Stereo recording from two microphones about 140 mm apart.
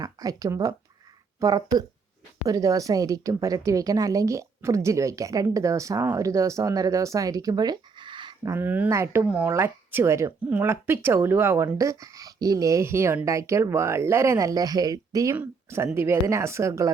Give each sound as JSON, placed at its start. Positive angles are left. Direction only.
{"t": 0.0, "sound": "a woman's voice", "side_deg": -25}
{"t": 8.5, "sound": "a woman's voice", "side_deg": -10}
{"t": 9.2, "sound": "a woman's voice", "side_deg": -10}